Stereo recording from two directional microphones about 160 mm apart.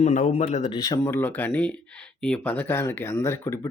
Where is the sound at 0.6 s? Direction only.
25° left (ahead or behind).